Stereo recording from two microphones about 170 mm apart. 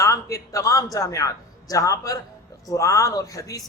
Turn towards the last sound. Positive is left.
turn(degrees=20)  # may be behind; listen again after turning